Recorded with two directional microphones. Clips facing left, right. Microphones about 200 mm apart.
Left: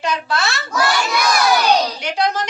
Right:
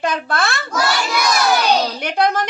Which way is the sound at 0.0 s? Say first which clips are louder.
Right 1 dB; 55° right (ahead or behind).